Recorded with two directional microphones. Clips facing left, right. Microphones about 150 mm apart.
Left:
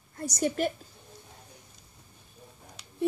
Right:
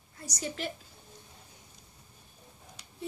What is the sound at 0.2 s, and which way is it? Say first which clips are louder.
Speech: left 9 dB; 50° left (ahead or behind).